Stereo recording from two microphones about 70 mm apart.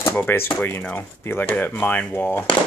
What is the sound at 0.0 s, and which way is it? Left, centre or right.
Speech, left.